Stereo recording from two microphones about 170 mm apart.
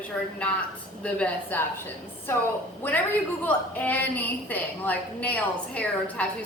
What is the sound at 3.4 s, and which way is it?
A woman's voice, 10° left (ahead or behind).